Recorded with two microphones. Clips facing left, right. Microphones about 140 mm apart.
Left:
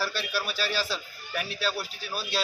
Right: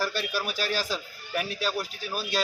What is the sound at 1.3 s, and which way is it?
Speech, 10° right (ahead or behind).